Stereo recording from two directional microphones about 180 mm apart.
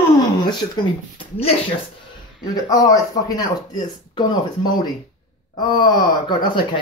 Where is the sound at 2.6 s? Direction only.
20° left (ahead or behind).